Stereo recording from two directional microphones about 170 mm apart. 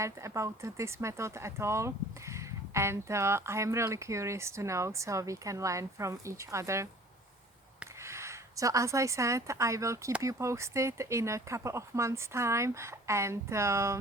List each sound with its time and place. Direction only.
0.0 s speech: 15° right (ahead or behind)
8.0 s speech: 15° right (ahead or behind)